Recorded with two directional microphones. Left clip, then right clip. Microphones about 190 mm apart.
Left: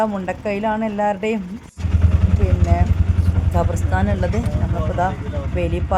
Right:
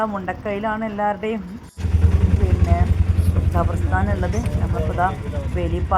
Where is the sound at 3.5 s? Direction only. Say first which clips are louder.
Left 1 dB; 20° left (ahead or behind).